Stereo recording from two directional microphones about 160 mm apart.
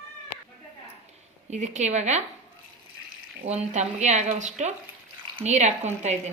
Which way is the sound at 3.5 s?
45° right (ahead or behind).